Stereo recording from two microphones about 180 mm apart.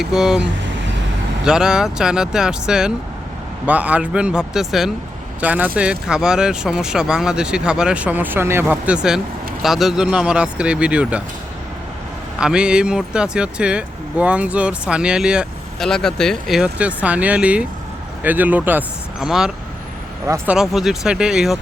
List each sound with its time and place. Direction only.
0.0 s speech: centre (ahead or behind)
1.5 s speech: 5° right (ahead or behind)
12.4 s speech: 5° right (ahead or behind)
20.2 s speech: 15° right (ahead or behind)
20.6 s speech: centre (ahead or behind)